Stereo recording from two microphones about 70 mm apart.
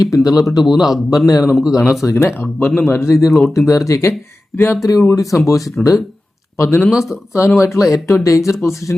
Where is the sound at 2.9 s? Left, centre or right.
Left.